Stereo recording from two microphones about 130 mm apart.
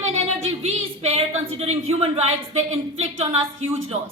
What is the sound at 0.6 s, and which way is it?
A woman's voice, 55° right (ahead or behind).